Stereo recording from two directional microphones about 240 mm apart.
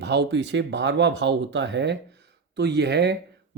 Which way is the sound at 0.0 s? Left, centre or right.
Right.